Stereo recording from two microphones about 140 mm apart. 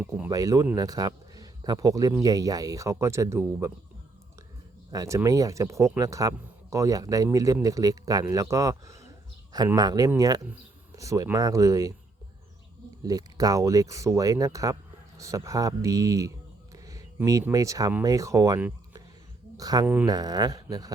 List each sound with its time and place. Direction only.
0.0 s speech: 10° right (ahead or behind)
0.3 s a man's voice: 25° right (ahead or behind)
4.9 s speech: 25° right (ahead or behind)
13.0 s speech: 25° right (ahead or behind)
16.7 s a sound: 25° right (ahead or behind)
17.5 s speech: 25° right (ahead or behind)